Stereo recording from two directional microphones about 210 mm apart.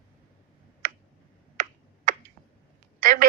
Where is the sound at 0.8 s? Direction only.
40° right (ahead or behind).